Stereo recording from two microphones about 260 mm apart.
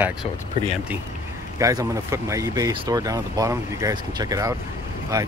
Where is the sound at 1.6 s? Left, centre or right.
Centre.